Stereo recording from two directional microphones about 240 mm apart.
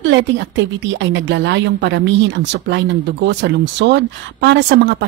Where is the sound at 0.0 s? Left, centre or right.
Right.